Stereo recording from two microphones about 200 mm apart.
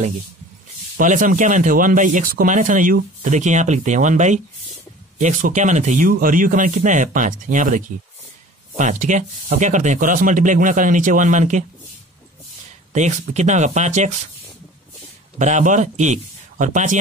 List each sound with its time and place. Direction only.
0.9 s speech: 40° right (ahead or behind)
12.9 s speech: 35° right (ahead or behind)
15.3 s speech: 35° right (ahead or behind)